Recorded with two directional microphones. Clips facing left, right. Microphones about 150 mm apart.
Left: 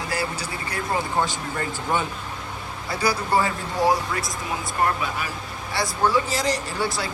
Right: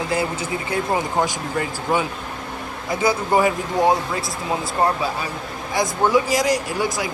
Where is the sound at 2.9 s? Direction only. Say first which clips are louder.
Right 4 dB; 20° right (ahead or behind).